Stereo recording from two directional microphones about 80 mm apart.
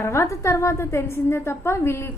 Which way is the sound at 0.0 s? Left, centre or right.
Left.